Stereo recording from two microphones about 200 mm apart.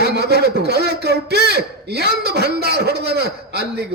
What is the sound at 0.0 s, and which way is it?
A man's voice, 55° right (ahead or behind).